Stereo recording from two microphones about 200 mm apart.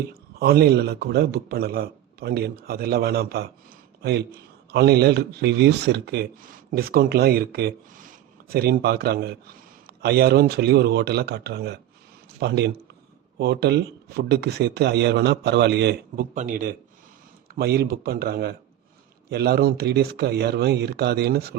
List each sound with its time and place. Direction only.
0.3 s speech: 50° right (ahead or behind)
16.3 s speech: 40° right (ahead or behind)
17.5 s speech: 50° right (ahead or behind)